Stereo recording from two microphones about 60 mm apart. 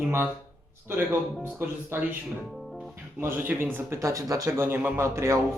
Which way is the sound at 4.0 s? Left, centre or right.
Right.